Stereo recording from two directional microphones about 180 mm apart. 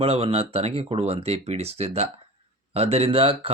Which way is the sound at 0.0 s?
35° right (ahead or behind).